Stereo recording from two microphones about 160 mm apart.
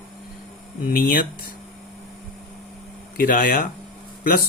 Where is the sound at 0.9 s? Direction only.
65° left (ahead or behind).